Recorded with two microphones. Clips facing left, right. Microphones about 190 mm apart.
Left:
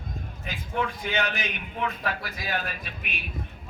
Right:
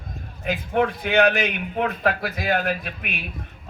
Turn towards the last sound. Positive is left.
turn(degrees=-60)  # may be behind; listen again after turning